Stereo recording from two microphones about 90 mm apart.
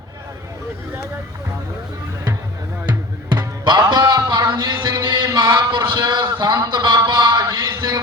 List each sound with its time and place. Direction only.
3.2 s music: 55° right (ahead or behind)
3.8 s music: 45° right (ahead or behind)
4.3 s a sound: 55° right (ahead or behind)
7.6 s music: 45° right (ahead or behind)